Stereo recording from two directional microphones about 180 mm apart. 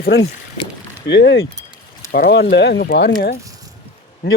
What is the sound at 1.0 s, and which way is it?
Speech, 70° left (ahead or behind).